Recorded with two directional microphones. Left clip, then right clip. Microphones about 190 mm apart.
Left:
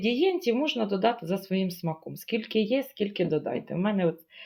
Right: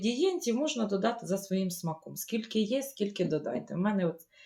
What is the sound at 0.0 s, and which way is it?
Speech, 30° left (ahead or behind).